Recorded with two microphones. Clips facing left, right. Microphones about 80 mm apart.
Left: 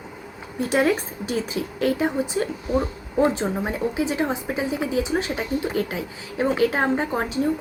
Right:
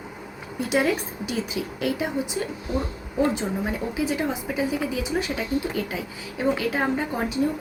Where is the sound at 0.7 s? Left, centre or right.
Left.